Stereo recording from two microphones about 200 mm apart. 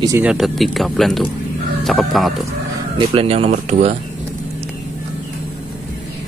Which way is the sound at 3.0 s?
30° right (ahead or behind).